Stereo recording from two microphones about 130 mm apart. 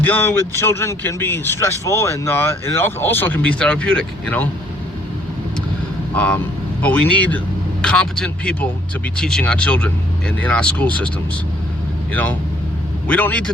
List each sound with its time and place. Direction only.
0.0 s speech: 15° left (ahead or behind)
6.1 s speech: 10° left (ahead or behind)
12.1 s speech: 10° left (ahead or behind)